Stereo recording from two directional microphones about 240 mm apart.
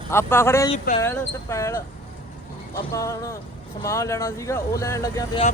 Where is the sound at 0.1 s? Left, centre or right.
Centre.